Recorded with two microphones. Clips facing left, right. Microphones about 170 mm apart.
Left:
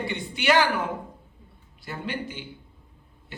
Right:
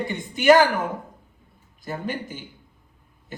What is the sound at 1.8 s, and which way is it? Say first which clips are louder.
Speech: right 3 dB; 45° right (ahead or behind).